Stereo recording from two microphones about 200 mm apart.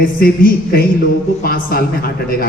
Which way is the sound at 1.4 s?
50° left (ahead or behind).